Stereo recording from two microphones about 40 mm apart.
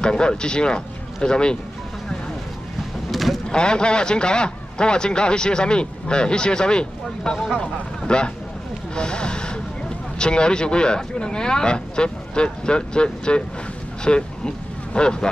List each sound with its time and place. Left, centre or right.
0.0 s a man's voice: left
3.1 s vehicle: centre
3.4 s a man's voice: left
7.3 s speech: centre
7.6 s a man's voice: left